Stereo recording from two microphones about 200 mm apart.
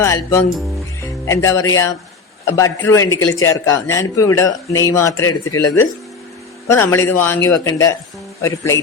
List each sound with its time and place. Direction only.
0.0 s a man's voice: 15° left (ahead or behind)
6.9 s a man's voice: 10° left (ahead or behind)